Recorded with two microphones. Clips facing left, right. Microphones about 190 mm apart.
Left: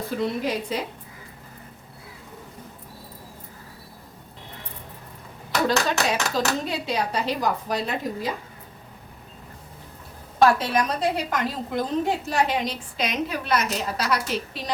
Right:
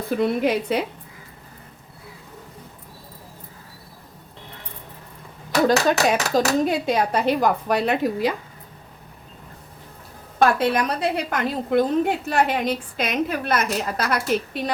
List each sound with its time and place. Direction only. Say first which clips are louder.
0.2 s a woman's voice: right 6 dB; 60° right (ahead or behind)
5.6 s a woman's voice: right 5 dB; 45° right (ahead or behind); by 8.3 s 65° right (ahead or behind)
10.6 s a woman's voice: right 3 dB; 60° right (ahead or behind)